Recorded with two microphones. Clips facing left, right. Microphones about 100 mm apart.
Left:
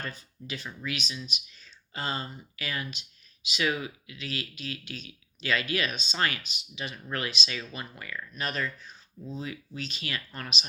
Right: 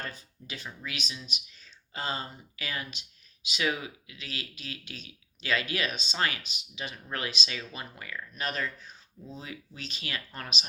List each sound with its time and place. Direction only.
0.0 s speech: 30° right (ahead or behind)